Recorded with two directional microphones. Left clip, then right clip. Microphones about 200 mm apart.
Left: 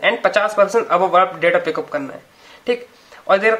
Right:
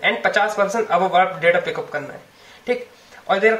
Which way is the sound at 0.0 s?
50° left (ahead or behind).